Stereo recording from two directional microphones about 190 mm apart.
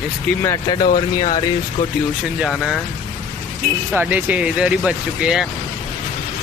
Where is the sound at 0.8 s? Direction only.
45° left (ahead or behind).